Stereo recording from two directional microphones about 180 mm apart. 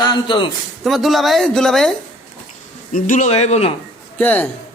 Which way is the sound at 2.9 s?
45° left (ahead or behind).